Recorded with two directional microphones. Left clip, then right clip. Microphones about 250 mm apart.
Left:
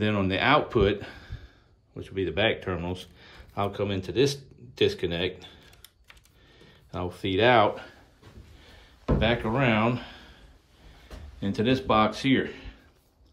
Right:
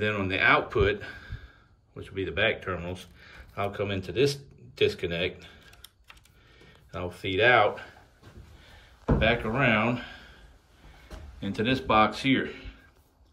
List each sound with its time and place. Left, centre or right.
0.0 s speech: centre
5.7 s typing: centre
6.6 s speech: centre
9.2 s speech: centre
11.3 s speech: centre